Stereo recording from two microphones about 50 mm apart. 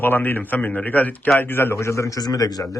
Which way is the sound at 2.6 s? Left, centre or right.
Left.